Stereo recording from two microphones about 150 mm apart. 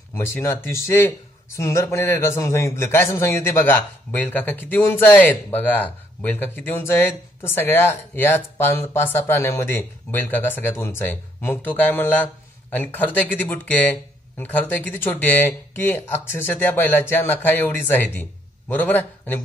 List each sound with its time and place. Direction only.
0.1 s a man's voice: 15° left (ahead or behind)